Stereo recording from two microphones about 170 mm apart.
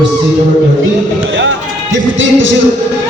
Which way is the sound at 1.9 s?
90° right.